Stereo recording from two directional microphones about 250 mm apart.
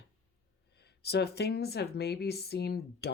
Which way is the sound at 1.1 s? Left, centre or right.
Left.